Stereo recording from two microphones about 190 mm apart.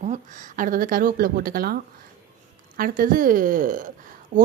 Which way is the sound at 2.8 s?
45° right (ahead or behind).